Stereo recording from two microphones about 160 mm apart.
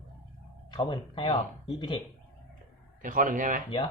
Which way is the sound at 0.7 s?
30° left (ahead or behind).